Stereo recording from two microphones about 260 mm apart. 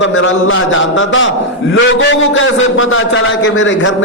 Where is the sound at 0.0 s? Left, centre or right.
Left.